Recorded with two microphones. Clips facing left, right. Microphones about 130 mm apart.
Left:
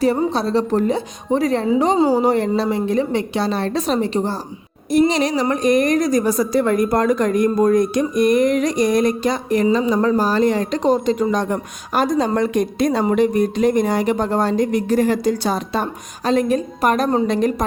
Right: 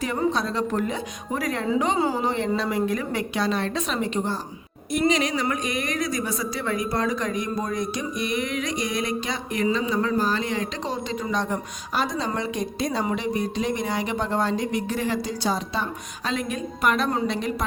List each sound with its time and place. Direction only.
0.0 s speech: 35° left (ahead or behind)
2.0 s speech: 40° left (ahead or behind)
2.6 s speech: 30° left (ahead or behind); by 17.7 s 45° left (ahead or behind)